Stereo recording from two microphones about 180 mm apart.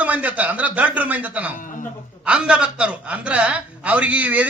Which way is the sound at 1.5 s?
45° left (ahead or behind).